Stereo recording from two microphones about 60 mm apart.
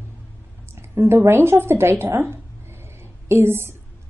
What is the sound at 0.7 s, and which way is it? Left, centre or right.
A woman's voice, right.